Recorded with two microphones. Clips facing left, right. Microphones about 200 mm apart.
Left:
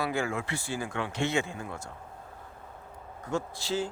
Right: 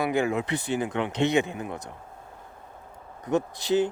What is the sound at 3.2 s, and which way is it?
Speech, 20° right (ahead or behind).